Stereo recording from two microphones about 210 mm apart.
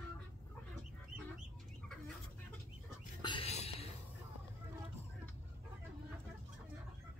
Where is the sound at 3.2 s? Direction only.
25° left (ahead or behind).